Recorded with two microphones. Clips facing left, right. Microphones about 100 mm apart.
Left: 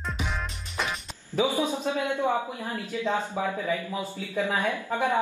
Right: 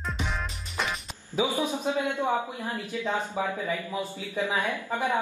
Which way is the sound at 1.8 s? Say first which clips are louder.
Left 1 dB; 15° right (ahead or behind).